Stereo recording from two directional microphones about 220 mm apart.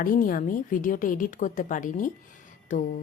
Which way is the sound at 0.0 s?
40° left (ahead or behind).